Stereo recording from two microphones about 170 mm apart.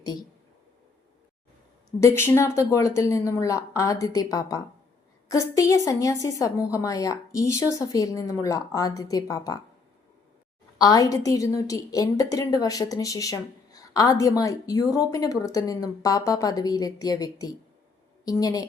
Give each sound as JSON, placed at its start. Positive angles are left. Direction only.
{"t": 0.0, "sound": "a sound", "side_deg": 25}
{"t": 2.0, "sound": "a woman's voice", "side_deg": 15}
{"t": 10.8, "sound": "a woman's voice", "side_deg": 20}